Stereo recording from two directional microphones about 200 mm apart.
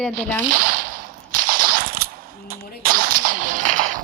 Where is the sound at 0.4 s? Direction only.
40° right (ahead or behind).